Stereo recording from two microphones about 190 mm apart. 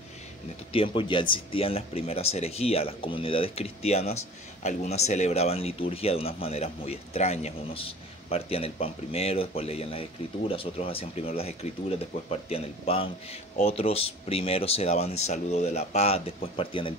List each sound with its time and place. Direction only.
0.7 s speech: 25° left (ahead or behind)